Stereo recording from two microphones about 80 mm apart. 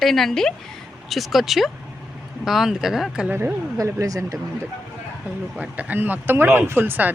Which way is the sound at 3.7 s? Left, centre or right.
Right.